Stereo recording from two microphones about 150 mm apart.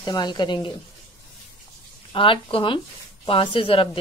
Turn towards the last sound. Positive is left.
turn(degrees=35)  # may be behind; listen again after turning